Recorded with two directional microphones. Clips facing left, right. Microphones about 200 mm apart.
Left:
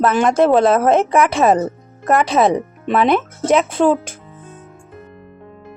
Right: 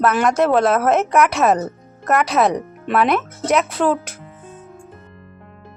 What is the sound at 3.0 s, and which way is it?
Speech, 25° left (ahead or behind).